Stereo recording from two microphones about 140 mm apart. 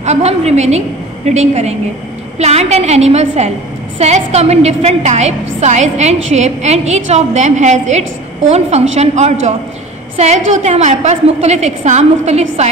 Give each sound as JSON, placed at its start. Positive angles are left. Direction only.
{"t": 0.0, "sound": "a woman's voice", "side_deg": -50}